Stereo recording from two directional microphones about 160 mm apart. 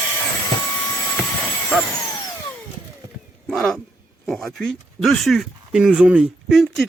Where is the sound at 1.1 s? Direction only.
10° left (ahead or behind).